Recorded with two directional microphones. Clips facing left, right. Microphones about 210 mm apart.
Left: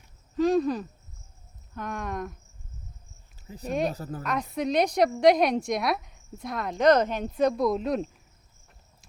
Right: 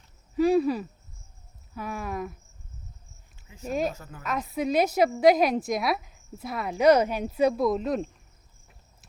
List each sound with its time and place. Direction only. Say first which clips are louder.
0.3 s cricket: right 1 dB; 10° right (ahead or behind)
1.7 s a woman's voice: even; 5° right (ahead or behind)
3.4 s speech: left 2 dB; 35° left (ahead or behind)
3.7 s a woman's voice: even; centre (ahead or behind)
3.9 s speech: left 9 dB; 35° left (ahead or behind)
4.2 s a woman's voice: right 1 dB; 5° right (ahead or behind)